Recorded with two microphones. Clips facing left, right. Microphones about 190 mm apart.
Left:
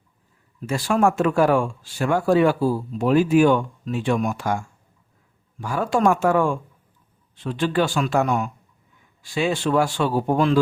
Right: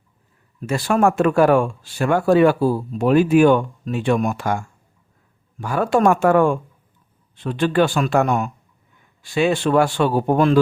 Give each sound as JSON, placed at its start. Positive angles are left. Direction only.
{"t": 0.7, "sound": "speech", "side_deg": -60}